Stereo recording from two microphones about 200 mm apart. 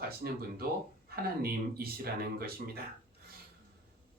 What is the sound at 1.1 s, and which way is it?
Speech, 50° right (ahead or behind).